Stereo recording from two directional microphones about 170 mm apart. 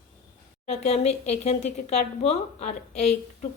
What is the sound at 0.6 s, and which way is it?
Speech, 40° left (ahead or behind).